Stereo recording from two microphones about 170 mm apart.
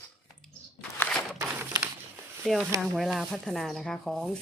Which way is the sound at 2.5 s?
5° left (ahead or behind).